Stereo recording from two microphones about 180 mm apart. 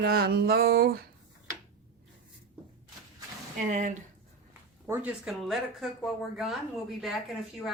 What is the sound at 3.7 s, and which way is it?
Speech, 45° right (ahead or behind).